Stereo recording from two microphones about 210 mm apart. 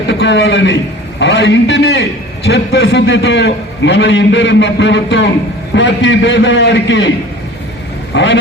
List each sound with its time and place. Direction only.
0.1 s a man's voice: 60° left (ahead or behind)
8.1 s a man's voice: 60° left (ahead or behind)